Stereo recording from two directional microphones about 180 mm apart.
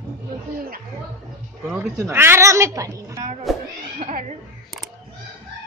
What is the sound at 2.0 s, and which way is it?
Speech, 15° right (ahead or behind).